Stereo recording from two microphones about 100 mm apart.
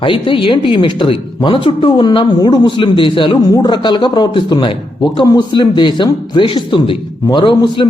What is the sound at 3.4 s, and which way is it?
Speech, 40° left (ahead or behind).